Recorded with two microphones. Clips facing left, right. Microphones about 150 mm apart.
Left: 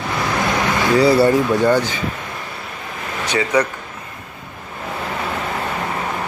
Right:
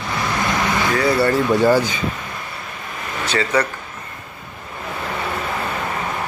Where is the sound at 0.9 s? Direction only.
30° left (ahead or behind).